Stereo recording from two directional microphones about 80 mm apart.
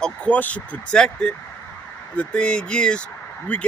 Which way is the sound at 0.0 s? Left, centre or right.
Centre.